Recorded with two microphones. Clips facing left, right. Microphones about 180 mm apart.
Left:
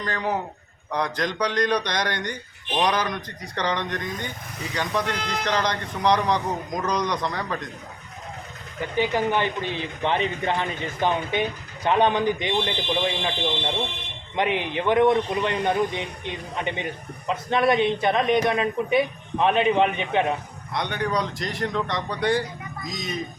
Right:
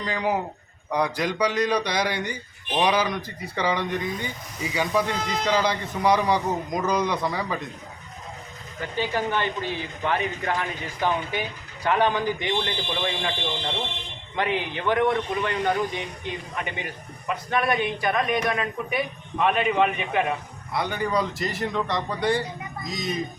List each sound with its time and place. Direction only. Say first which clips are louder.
0.0 s a man's voice: right 1 dB; 10° right (ahead or behind)
5.1 s a man's voice: right 1 dB; 70° left (ahead or behind)
5.5 s a man's voice: right 2 dB; 5° right (ahead or behind)
9.0 s a man's voice: left 3 dB; 15° left (ahead or behind)
14.3 s a man's voice: left 2 dB; 20° left (ahead or behind)
20.7 s a man's voice: right 1 dB; 5° right (ahead or behind)